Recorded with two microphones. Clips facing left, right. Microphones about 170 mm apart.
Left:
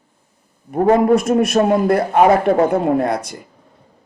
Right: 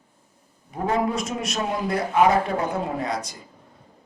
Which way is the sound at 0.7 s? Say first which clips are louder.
Left 11 dB; 60° left (ahead or behind).